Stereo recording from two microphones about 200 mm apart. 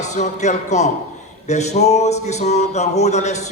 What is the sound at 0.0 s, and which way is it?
A man's voice, 35° left (ahead or behind).